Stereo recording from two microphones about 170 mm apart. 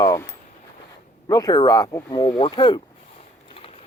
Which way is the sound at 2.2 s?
35° left (ahead or behind).